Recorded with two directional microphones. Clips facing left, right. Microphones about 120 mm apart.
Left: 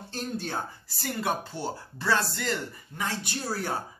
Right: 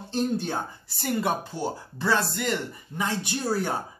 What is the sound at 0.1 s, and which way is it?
Speech, 20° right (ahead or behind).